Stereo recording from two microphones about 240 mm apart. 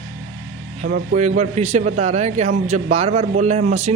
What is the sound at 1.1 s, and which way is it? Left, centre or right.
A man's voice, right.